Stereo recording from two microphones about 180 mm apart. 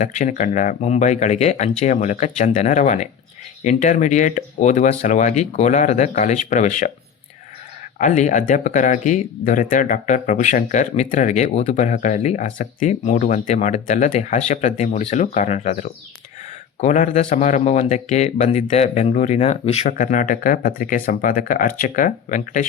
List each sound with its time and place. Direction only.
0.0 s speech: 45° left (ahead or behind)
7.9 s speech: 45° left (ahead or behind)